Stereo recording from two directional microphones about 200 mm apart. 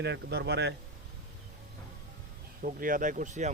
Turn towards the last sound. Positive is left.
turn(degrees=-35)  # may be behind; listen again after turning